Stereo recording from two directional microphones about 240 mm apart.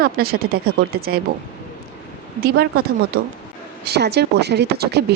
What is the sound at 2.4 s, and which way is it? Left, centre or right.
A woman's voice, right.